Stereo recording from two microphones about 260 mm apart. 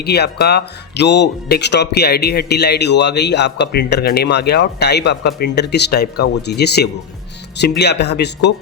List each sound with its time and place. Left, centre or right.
0.0 s speech: left